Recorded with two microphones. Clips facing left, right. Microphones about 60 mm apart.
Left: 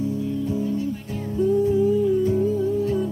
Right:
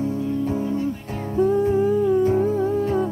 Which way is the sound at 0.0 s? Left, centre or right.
Right.